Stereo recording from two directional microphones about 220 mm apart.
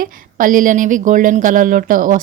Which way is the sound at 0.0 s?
40° right (ahead or behind).